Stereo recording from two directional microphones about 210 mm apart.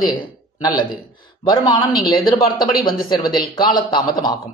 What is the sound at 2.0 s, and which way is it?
Speech, 20° left (ahead or behind).